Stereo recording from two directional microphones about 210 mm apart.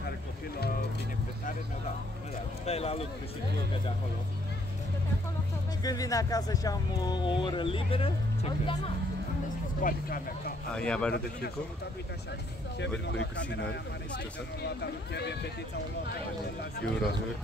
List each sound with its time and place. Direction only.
2.6 s speech: 30° left (ahead or behind)
5.9 s speech: 15° left (ahead or behind)
9.8 s speech: 40° left (ahead or behind)
10.7 s speech: 5° left (ahead or behind)
13.0 s speech: 60° left (ahead or behind)